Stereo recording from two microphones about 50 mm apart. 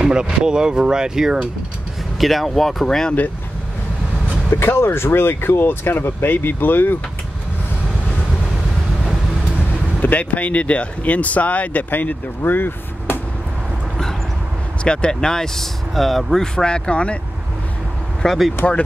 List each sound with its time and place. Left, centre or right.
0.0 s speech: centre
2.1 s speech: centre
4.5 s speech: left
10.0 s speech: left
14.8 s speech: centre
16.5 s speech: centre
18.2 s speech: centre